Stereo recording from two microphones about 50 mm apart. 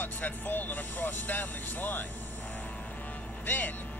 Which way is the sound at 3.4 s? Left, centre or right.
Left.